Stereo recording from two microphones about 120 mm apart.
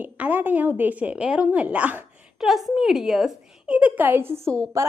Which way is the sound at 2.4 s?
Centre (ahead or behind).